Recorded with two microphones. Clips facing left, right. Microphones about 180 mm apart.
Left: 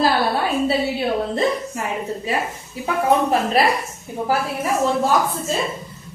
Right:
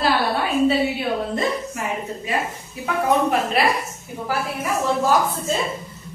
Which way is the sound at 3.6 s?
40° left (ahead or behind).